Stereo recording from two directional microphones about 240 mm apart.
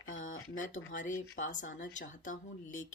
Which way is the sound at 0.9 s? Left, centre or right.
Left.